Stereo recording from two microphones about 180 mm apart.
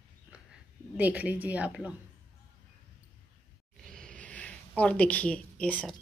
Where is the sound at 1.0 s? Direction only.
10° right (ahead or behind).